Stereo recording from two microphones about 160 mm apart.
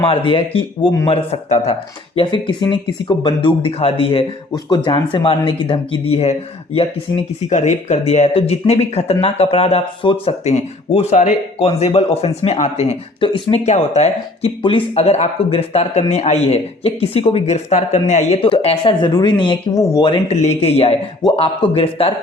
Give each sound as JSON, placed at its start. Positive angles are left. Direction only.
{"t": 0.0, "sound": "a man's voice", "side_deg": 35}
{"t": 2.1, "sound": "a man's voice", "side_deg": 30}
{"t": 7.4, "sound": "a man's voice", "side_deg": 45}
{"t": 20.1, "sound": "a man's voice", "side_deg": 40}